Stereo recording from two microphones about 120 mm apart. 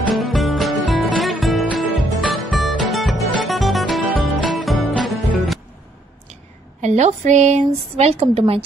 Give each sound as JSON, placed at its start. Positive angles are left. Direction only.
{"t": 0.1, "sound": "music", "side_deg": 0}
{"t": 6.8, "sound": "speech", "side_deg": -75}